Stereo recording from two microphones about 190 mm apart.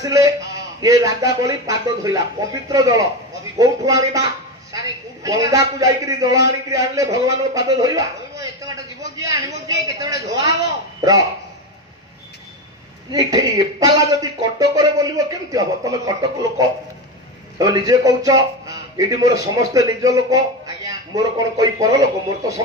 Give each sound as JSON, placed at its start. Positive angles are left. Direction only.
{"t": 0.0, "sound": "a man's voice", "side_deg": -15}
{"t": 9.2, "sound": "a sound", "side_deg": -15}
{"t": 13.1, "sound": "a man's voice", "side_deg": -20}